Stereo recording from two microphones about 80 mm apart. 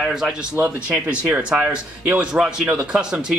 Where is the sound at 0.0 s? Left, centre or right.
Centre.